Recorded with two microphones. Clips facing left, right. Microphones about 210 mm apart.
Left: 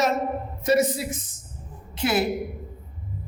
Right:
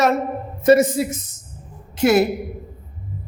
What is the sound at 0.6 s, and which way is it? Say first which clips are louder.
A woman's voice: right 7 dB; 50° right (ahead or behind).